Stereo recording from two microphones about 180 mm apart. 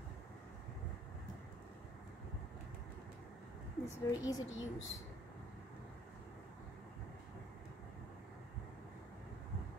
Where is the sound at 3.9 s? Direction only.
20° left (ahead or behind).